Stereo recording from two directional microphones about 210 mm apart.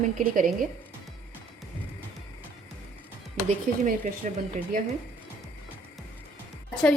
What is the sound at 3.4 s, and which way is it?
Speech, 40° right (ahead or behind).